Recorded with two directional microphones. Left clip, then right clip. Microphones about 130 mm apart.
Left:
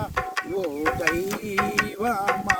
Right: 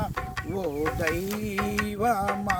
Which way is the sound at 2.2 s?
35° left (ahead or behind).